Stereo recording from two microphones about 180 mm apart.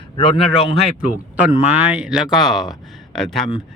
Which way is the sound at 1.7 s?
10° right (ahead or behind).